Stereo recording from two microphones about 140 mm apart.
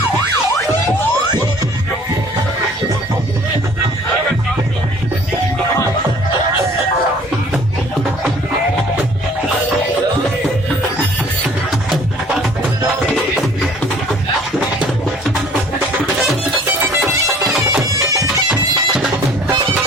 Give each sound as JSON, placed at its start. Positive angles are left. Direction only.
{"t": 18.1, "sound": "bagpipes", "side_deg": -25}